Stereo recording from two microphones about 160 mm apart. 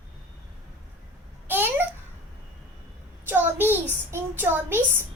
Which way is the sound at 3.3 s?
10° right (ahead or behind).